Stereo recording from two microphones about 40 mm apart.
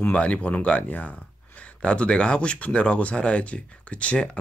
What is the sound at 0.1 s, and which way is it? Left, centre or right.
Speech, left.